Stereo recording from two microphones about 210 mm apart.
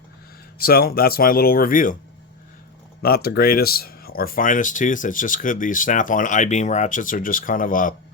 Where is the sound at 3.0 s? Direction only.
45° left (ahead or behind).